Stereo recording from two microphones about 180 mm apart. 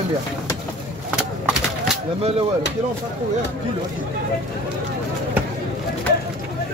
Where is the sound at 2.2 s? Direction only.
30° right (ahead or behind).